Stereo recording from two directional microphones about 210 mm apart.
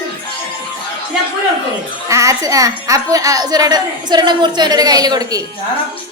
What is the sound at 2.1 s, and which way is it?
A woman's voice, 15° right (ahead or behind).